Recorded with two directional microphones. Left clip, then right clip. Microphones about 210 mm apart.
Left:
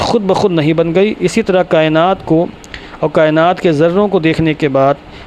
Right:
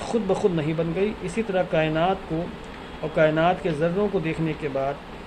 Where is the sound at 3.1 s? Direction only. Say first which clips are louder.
Left 9 dB; 45° left (ahead or behind).